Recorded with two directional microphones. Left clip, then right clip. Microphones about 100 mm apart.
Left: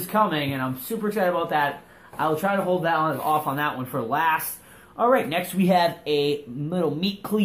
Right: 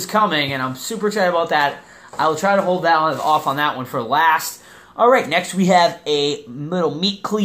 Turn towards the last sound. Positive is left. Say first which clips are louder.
# right 6 dB
turn(degrees=-15)  # may be behind; listen again after turning